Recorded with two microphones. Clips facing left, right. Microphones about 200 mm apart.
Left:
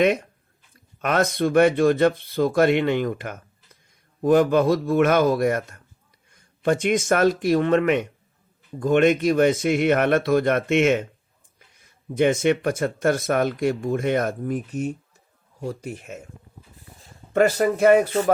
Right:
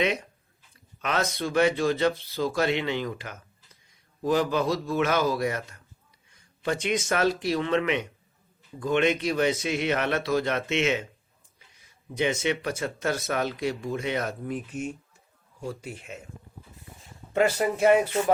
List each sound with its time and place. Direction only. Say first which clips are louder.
1.0 s speech: left 7 dB; 55° left (ahead or behind)
17.3 s speech: left 5 dB; 45° left (ahead or behind)